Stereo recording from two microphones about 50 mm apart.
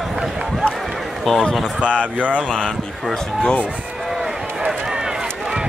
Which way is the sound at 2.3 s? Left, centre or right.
Centre.